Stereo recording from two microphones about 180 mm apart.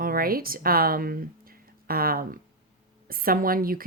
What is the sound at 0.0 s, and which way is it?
Speech, 55° right (ahead or behind).